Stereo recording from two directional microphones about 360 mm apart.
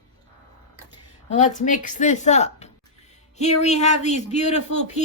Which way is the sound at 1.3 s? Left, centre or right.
Centre.